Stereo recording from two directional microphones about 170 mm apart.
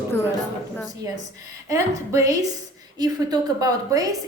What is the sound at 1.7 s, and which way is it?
A woman's voice, 20° right (ahead or behind).